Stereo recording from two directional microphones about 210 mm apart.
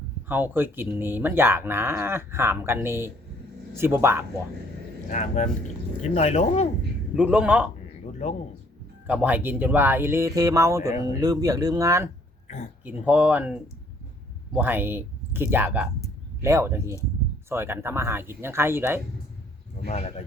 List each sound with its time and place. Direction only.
0.3 s speech: 10° right (ahead or behind)
5.1 s speech: 35° left (ahead or behind)
7.2 s speech: 5° right (ahead or behind)
8.2 s speech: 30° left (ahead or behind)
9.0 s speech: 5° right (ahead or behind)
19.9 s speech: 30° left (ahead or behind)